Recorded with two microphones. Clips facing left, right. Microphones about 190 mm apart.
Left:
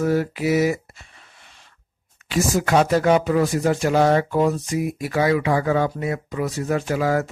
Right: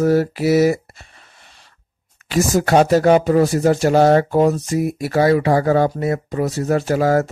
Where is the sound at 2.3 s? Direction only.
40° right (ahead or behind).